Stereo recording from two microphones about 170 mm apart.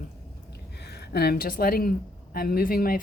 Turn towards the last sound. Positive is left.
turn(degrees=60)  # may be behind; listen again after turning